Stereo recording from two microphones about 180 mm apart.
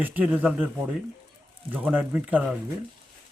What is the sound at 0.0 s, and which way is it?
Speech, 10° right (ahead or behind).